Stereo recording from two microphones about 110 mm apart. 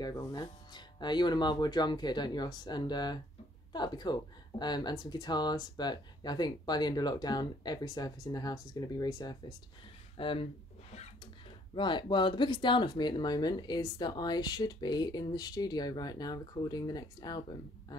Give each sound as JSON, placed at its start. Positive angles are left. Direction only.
{"t": 0.0, "sound": "speech", "side_deg": 35}
{"t": 10.1, "sound": "a sound", "side_deg": 55}
{"t": 11.7, "sound": "speech", "side_deg": 45}